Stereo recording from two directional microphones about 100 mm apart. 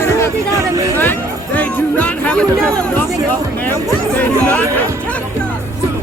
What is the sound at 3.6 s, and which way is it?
Speech, 20° left (ahead or behind).